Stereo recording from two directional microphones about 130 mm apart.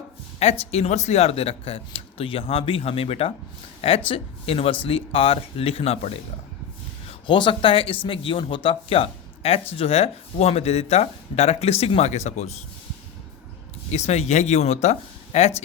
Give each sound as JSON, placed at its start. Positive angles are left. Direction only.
{"t": 0.7, "sound": "speech", "side_deg": 60}
{"t": 7.1, "sound": "speech", "side_deg": 40}
{"t": 13.9, "sound": "speech", "side_deg": 60}